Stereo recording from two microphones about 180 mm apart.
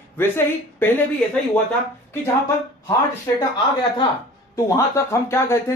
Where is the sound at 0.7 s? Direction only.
10° left (ahead or behind).